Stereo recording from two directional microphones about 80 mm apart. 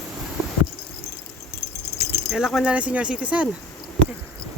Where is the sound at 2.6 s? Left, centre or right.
Centre.